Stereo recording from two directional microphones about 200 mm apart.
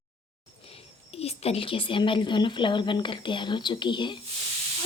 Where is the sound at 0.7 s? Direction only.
30° left (ahead or behind).